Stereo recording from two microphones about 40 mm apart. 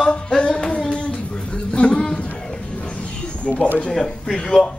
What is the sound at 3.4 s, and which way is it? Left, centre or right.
Speech, left.